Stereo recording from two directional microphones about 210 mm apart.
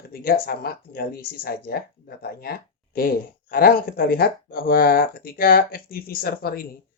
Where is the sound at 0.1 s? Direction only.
45° left (ahead or behind).